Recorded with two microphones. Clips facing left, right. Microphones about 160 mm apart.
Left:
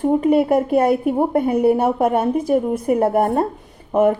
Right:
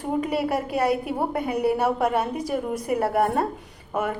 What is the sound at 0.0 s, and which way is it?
A woman's voice, 50° left (ahead or behind).